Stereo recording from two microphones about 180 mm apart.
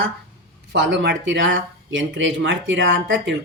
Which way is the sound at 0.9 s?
85° right.